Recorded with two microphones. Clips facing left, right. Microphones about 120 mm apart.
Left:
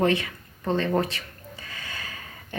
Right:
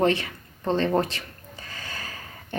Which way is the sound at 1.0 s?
35° right (ahead or behind).